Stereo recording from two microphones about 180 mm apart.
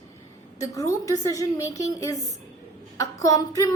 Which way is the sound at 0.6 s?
20° left (ahead or behind).